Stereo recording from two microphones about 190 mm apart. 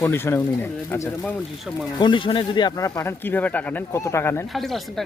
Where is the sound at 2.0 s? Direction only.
25° left (ahead or behind).